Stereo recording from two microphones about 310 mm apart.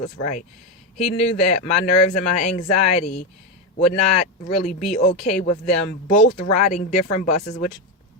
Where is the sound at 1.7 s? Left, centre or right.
Left.